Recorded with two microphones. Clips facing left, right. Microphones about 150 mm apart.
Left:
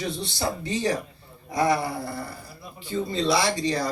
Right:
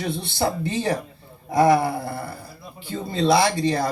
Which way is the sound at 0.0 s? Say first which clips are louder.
Right 4 dB; 60° right (ahead or behind).